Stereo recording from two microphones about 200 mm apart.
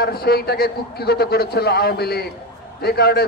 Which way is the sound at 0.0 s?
50° left (ahead or behind).